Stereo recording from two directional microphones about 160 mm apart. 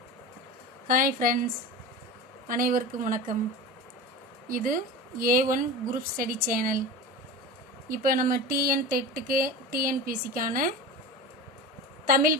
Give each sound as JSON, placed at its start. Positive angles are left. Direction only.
{"t": 0.9, "sound": "speech", "side_deg": -60}
{"t": 2.5, "sound": "speech", "side_deg": -60}
{"t": 4.4, "sound": "speech", "side_deg": -60}
{"t": 7.9, "sound": "speech", "side_deg": -60}
{"t": 12.0, "sound": "speech", "side_deg": -60}